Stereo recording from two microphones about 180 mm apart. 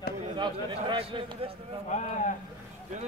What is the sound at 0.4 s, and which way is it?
A man's voice, 25° right (ahead or behind).